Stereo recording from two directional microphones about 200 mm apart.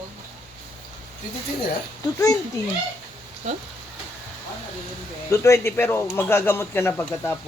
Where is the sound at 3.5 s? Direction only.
35° right (ahead or behind).